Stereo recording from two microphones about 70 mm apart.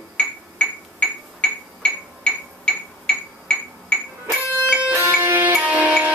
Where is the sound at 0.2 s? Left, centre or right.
Centre.